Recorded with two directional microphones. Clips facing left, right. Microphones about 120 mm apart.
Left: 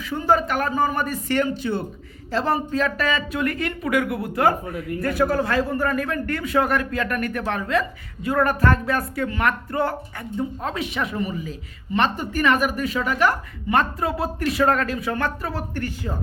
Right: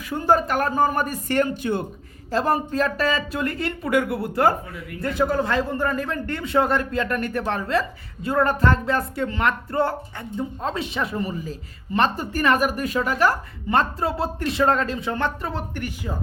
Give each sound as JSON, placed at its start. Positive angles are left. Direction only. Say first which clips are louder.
{"t": 0.3, "sound": "speech", "louder": "right 1 dB", "side_deg": -40}